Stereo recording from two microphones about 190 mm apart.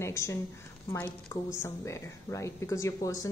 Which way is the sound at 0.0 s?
15° left (ahead or behind).